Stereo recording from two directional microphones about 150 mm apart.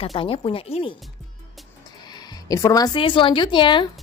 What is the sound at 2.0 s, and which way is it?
Speech, 30° left (ahead or behind).